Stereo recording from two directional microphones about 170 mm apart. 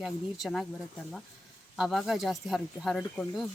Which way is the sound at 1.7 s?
Centre (ahead or behind).